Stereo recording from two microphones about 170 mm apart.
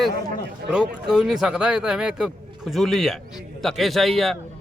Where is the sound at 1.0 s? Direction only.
5° right (ahead or behind).